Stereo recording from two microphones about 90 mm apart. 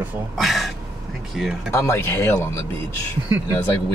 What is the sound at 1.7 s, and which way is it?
Speech, 30° left (ahead or behind).